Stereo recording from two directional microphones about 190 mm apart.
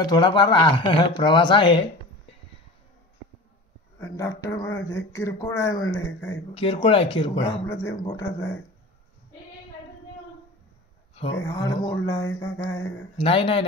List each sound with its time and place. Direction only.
0.0 s speech: 25° left (ahead or behind)
4.0 s speech: 15° left (ahead or behind)
6.5 s speech: 30° left (ahead or behind)
7.6 s speech: 15° left (ahead or behind)
11.4 s speech: 15° left (ahead or behind)
13.2 s speech: 30° left (ahead or behind)